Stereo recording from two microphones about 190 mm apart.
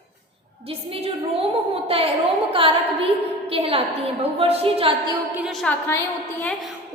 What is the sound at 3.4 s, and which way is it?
A woman's voice, 30° right (ahead or behind).